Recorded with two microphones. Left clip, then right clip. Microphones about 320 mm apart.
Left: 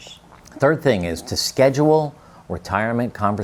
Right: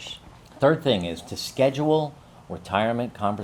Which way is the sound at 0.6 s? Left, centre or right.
Left.